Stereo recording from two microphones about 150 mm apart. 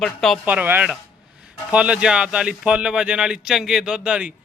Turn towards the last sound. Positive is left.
turn(degrees=-5)  # may be behind; listen again after turning